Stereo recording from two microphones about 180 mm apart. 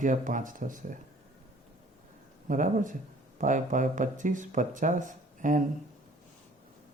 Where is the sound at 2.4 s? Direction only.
45° right (ahead or behind).